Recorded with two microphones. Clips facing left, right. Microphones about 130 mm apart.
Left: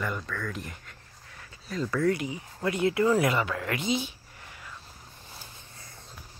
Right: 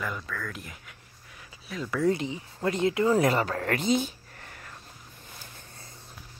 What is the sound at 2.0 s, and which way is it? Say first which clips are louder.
Speech: right 1 dB; 25° right (ahead or behind).